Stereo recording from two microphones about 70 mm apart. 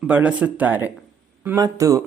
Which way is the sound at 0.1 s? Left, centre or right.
Centre.